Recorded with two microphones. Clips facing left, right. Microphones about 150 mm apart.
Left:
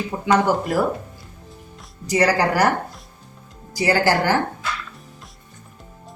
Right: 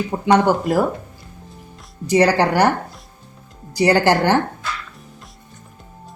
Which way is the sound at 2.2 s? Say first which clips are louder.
Right 1 dB; centre (ahead or behind).